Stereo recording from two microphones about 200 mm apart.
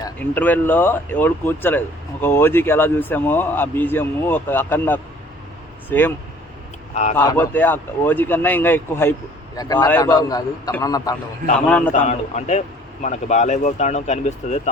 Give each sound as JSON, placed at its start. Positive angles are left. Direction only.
{"t": 0.0, "sound": "a man's voice", "side_deg": 10}
{"t": 7.2, "sound": "a man's voice", "side_deg": 10}
{"t": 11.9, "sound": "a man's voice", "side_deg": 35}